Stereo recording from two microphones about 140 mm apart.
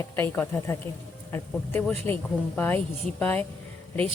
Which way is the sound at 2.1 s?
15° left (ahead or behind).